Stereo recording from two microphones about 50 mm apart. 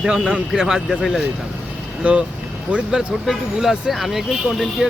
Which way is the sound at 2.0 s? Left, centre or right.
Right.